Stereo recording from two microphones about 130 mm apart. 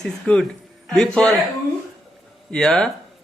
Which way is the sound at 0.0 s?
5° left (ahead or behind).